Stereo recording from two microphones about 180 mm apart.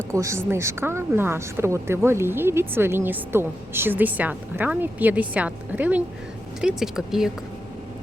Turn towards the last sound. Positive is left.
turn(degrees=-5)  # may be behind; listen again after turning